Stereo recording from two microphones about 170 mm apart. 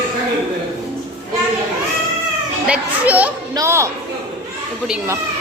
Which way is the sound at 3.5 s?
15° right (ahead or behind).